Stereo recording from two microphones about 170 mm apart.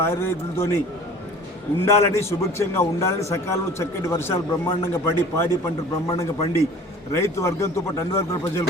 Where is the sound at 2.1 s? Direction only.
15° left (ahead or behind).